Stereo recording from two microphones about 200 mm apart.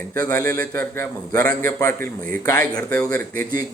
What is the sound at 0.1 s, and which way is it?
A man's voice, 10° left (ahead or behind).